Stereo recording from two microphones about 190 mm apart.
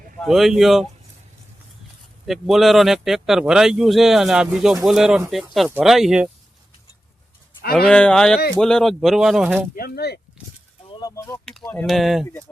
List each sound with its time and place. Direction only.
0.2 s speech: centre (ahead or behind)
2.2 s speech: centre (ahead or behind)
7.6 s speech: 55° left (ahead or behind)
7.9 s speech: 5° left (ahead or behind)
9.7 s speech: 55° left (ahead or behind)
10.8 s a sound: 20° left (ahead or behind)
11.4 s speech: 5° left (ahead or behind)